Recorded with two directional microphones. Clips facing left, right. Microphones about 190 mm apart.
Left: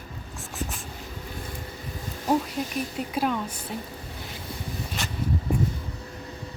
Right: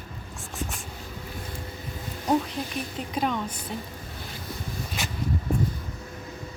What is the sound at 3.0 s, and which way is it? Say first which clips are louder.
Speech: even; 5° left (ahead or behind).